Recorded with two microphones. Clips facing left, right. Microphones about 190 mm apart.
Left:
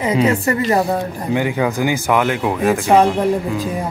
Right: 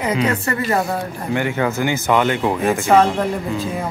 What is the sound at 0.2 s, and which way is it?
Speech, 15° left (ahead or behind).